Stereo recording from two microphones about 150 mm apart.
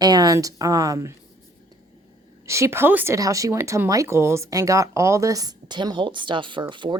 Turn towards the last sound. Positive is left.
turn(degrees=-30)  # may be behind; listen again after turning